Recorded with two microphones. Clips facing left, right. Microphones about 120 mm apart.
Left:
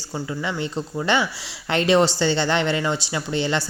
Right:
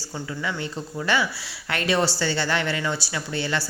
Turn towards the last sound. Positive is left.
turn(degrees=20)  # may be behind; listen again after turning